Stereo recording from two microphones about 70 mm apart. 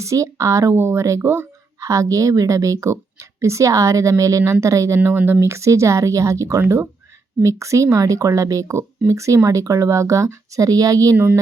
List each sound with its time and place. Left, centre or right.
0.0 s speech: right
1.2 s speech: right
1.8 s speech: right
5.0 s speech: right
5.5 s speech: right